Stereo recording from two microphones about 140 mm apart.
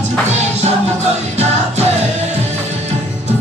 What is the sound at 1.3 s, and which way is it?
Music, 50° right (ahead or behind).